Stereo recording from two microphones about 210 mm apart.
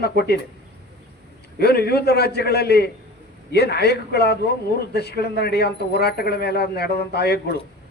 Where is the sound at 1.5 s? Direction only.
50° left (ahead or behind).